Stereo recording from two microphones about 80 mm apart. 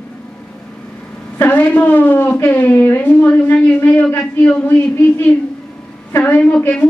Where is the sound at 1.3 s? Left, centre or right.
Left.